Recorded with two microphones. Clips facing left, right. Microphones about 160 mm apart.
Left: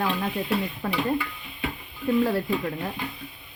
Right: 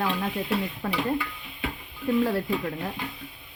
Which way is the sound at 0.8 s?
60° left (ahead or behind).